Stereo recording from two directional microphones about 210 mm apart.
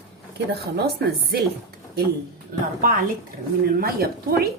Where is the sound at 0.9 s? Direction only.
50° right (ahead or behind).